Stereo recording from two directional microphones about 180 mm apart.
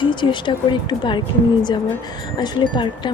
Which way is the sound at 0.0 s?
25° left (ahead or behind).